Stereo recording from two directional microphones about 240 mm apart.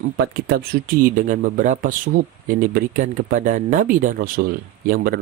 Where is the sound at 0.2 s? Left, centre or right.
Right.